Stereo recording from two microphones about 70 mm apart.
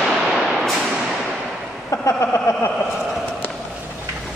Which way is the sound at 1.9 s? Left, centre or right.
Left.